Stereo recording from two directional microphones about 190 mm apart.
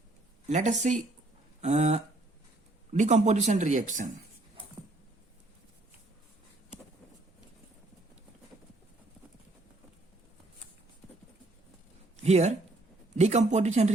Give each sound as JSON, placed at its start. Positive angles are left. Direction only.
{"t": 0.4, "sound": "speech", "side_deg": -40}
{"t": 12.1, "sound": "a sound", "side_deg": -35}
{"t": 13.1, "sound": "speech", "side_deg": -35}